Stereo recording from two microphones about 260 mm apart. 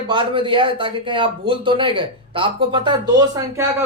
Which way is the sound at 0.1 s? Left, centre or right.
Centre.